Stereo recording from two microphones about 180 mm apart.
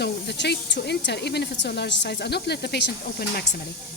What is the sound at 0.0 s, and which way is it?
Speech, 70° left (ahead or behind).